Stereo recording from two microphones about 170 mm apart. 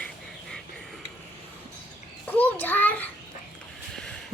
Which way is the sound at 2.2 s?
10° left (ahead or behind).